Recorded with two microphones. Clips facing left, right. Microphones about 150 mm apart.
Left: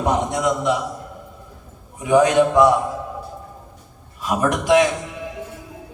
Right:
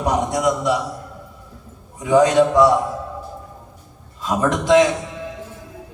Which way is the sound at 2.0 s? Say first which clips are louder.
Right 1 dB; 20° left (ahead or behind).